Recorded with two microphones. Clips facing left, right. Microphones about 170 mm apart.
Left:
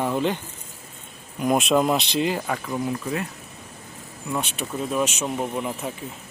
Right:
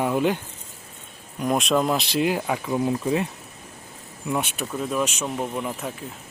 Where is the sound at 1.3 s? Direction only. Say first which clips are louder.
Left 2 dB; 5° left (ahead or behind); by 3.2 s 25° right (ahead or behind).